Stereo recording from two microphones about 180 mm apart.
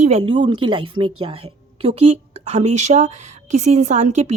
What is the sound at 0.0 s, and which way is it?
A woman's voice, 35° right (ahead or behind).